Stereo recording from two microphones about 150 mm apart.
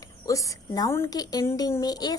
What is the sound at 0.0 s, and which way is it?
A woman's voice, 20° left (ahead or behind).